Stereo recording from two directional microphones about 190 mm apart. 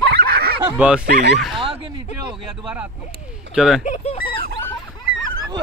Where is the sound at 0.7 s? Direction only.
5° right (ahead or behind).